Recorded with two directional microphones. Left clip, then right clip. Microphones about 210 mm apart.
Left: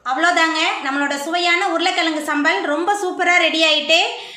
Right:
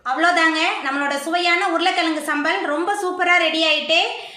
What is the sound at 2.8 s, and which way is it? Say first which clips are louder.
A woman's voice: left 1 dB; 15° left (ahead or behind).